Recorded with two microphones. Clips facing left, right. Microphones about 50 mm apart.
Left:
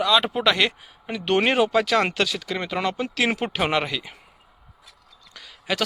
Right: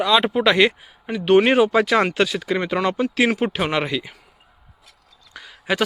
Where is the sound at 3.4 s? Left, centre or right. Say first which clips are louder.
Right 2 dB; centre.